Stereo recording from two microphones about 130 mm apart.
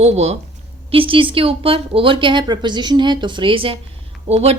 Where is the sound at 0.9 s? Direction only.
45° right (ahead or behind).